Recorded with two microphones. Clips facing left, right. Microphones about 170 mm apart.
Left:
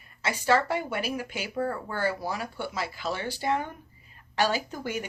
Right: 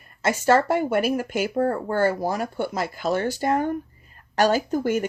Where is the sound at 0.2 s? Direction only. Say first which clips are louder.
Right 6 dB; 45° right (ahead or behind).